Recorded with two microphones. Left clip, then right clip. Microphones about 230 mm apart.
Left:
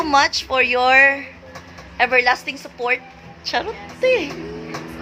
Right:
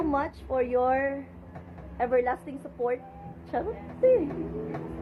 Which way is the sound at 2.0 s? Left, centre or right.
Centre.